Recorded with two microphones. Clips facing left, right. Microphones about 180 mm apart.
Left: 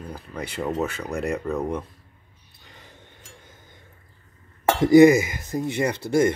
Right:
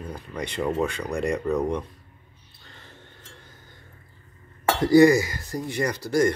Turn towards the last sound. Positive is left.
turn(degrees=25)  # may be behind; listen again after turning